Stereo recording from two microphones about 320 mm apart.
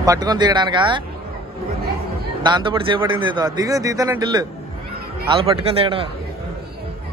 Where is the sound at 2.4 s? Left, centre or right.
Centre.